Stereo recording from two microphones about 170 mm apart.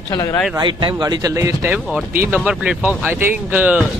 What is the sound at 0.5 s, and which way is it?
Speech, 25° right (ahead or behind).